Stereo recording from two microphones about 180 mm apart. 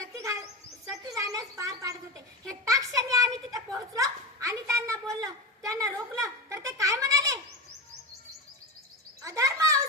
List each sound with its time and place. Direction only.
1.0 s speech: 20° right (ahead or behind)
2.6 s a sound: 20° right (ahead or behind)
9.2 s bird: 20° right (ahead or behind)